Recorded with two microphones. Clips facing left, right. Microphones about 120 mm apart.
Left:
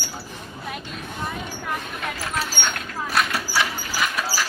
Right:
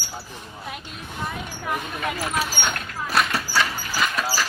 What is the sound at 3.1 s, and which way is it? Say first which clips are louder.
Horse: right 1 dB; centre (ahead or behind).